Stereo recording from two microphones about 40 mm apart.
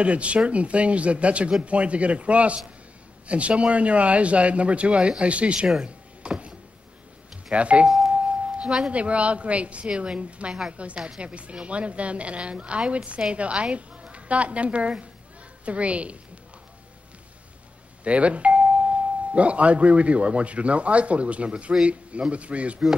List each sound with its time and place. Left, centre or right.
0.0 s speech: right
5.9 s a sound: right
7.5 s speech: right
8.1 s a sound: right
8.9 s speech: right
11.0 s speech: right
18.0 s speech: right